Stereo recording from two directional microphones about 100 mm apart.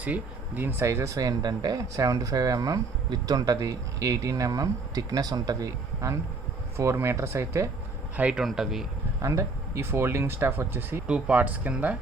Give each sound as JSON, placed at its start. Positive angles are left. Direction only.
{"t": 0.0, "sound": "speech", "side_deg": -15}
{"t": 8.1, "sound": "speech", "side_deg": -10}
{"t": 9.2, "sound": "speech", "side_deg": -30}
{"t": 11.0, "sound": "speech", "side_deg": -10}